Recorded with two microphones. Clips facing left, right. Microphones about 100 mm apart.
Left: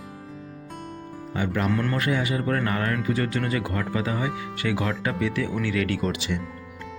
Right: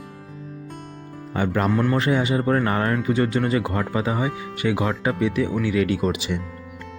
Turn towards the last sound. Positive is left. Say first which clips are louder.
# right 4 dB
turn(degrees=-20)  # may be behind; listen again after turning